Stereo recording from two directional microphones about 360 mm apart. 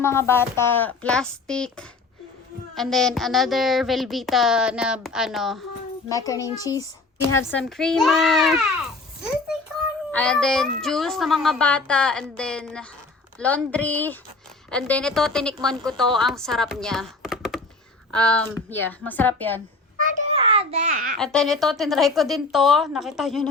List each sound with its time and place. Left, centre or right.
0.0 s a child's voice: centre
10.1 s a child's voice: centre
20.0 s a child's voice: right
21.2 s a child's voice: centre